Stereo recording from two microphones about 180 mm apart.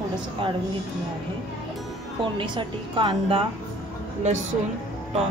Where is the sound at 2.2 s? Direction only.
25° right (ahead or behind).